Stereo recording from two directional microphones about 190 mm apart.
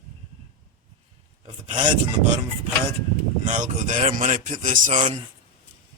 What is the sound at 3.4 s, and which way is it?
A man's voice, 40° right (ahead or behind).